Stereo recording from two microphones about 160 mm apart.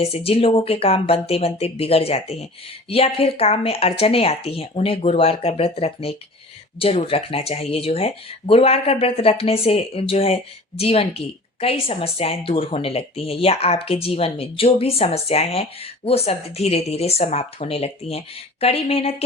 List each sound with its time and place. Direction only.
0.0 s speech: 40° left (ahead or behind)